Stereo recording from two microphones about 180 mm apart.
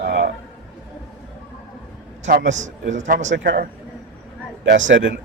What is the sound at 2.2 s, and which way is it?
A man's voice, 45° right (ahead or behind).